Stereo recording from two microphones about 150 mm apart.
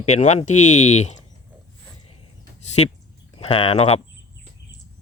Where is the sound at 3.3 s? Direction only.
40° left (ahead or behind).